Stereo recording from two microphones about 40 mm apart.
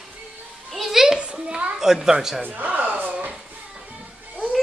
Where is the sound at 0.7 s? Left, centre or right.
Centre.